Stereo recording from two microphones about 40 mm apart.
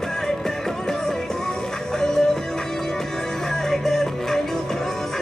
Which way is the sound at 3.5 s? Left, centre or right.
Centre.